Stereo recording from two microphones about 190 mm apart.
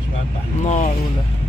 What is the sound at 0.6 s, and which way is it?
Speech, 40° left (ahead or behind).